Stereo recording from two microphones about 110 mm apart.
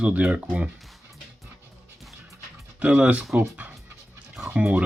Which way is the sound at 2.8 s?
10° right (ahead or behind).